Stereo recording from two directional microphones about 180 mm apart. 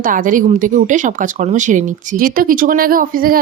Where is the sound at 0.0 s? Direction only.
50° right (ahead or behind).